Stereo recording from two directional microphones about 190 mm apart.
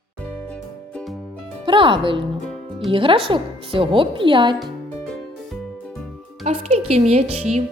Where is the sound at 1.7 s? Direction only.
25° right (ahead or behind).